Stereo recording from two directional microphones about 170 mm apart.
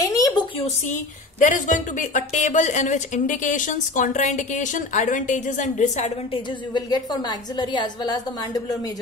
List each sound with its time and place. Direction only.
0.0 s a sound: 20° left (ahead or behind)
1.4 s a woman's voice: 50° left (ahead or behind)
6.7 s a woman's voice: 25° left (ahead or behind)